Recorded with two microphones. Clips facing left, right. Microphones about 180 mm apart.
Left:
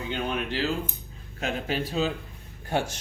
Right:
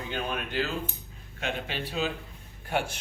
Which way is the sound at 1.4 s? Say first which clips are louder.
Left 4 dB; 40° left (ahead or behind).